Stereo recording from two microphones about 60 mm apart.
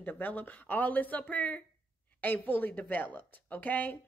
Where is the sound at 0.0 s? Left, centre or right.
Left.